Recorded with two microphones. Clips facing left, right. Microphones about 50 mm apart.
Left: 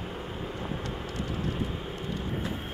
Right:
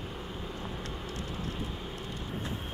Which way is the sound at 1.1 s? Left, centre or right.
Left.